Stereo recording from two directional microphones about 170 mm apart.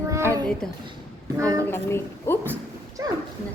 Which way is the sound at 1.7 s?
15° left (ahead or behind).